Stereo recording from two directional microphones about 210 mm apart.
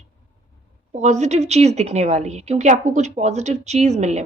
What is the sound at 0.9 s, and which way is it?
A woman's voice, 35° right (ahead or behind).